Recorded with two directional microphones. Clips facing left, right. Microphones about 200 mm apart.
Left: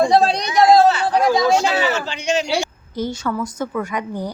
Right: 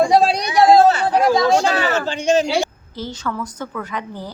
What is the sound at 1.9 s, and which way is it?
Speech, 50° right (ahead or behind).